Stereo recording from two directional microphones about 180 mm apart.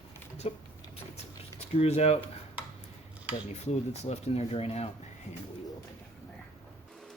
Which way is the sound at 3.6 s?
40° left (ahead or behind).